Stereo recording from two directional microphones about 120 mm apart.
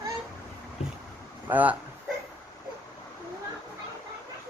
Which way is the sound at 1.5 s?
15° right (ahead or behind).